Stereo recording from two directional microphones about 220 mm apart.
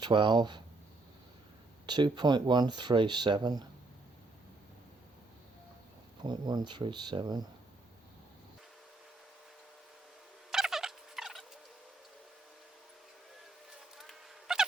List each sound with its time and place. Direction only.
0.0 s speech: 20° right (ahead or behind)
1.9 s speech: 20° right (ahead or behind)
6.2 s speech: 20° right (ahead or behind)
10.5 s gobble: centre (ahead or behind)
13.9 s a sound: centre (ahead or behind)